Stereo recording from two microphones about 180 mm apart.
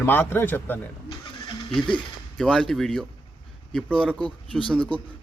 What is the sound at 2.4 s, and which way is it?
A man's voice, 5° left (ahead or behind).